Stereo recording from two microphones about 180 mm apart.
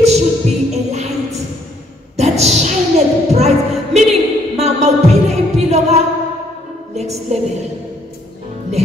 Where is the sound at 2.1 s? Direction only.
35° right (ahead or behind).